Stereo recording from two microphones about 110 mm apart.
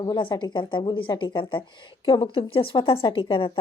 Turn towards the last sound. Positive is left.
turn(degrees=50)  # may be behind; listen again after turning